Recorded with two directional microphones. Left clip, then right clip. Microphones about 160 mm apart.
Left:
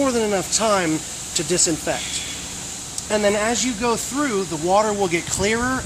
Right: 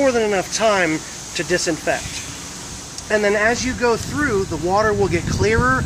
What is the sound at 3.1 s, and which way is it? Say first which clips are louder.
Speech: right 3 dB; 75° left (ahead or behind).